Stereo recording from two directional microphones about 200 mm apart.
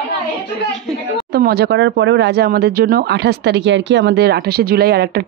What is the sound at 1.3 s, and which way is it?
Speech, 50° right (ahead or behind).